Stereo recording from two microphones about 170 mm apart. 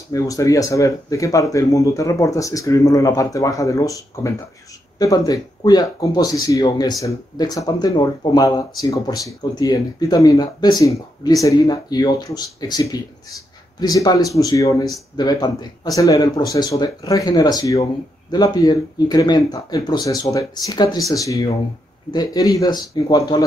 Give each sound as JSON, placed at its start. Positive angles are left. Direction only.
{"t": 0.1, "sound": "speech", "side_deg": 20}